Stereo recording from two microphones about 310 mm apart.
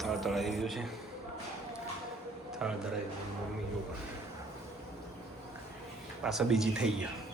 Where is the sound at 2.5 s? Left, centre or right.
Centre.